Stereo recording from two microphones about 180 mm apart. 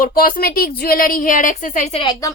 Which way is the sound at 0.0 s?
55° left (ahead or behind).